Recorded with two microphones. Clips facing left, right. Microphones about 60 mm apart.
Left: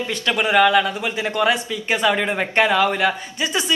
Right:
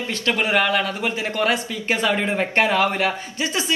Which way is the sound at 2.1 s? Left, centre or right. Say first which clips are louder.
Left 1 dB; left.